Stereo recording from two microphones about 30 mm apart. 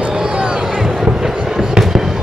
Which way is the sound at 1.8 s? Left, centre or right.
Centre.